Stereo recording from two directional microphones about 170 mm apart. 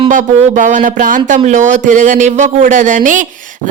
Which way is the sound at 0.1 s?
50° right (ahead or behind).